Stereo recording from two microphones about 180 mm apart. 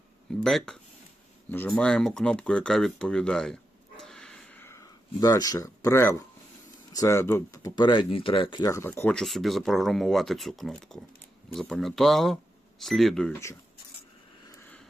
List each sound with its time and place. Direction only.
0.3 s speech: centre (ahead or behind)